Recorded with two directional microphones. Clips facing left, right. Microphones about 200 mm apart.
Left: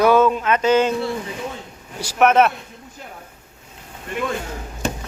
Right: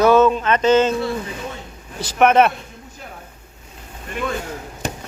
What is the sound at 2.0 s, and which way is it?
Speech, 5° left (ahead or behind).